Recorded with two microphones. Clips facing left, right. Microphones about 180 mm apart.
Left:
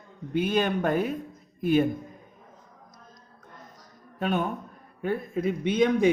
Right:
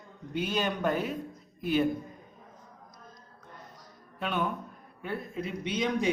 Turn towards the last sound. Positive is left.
turn(degrees=55)  # may be behind; listen again after turning